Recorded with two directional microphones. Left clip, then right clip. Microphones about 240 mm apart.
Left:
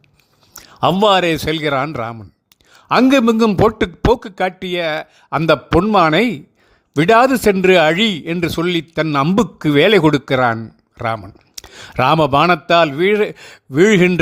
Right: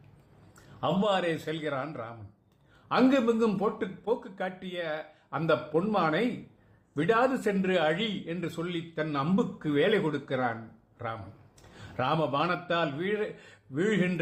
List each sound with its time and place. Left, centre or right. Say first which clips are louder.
0.5 s a man's voice: left 14 dB; left